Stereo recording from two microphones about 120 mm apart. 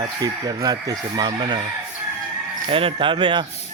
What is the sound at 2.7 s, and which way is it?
Speech, 50° right (ahead or behind).